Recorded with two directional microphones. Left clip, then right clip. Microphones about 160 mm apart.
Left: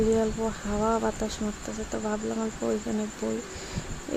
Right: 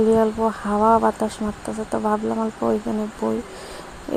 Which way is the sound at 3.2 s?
30° right (ahead or behind).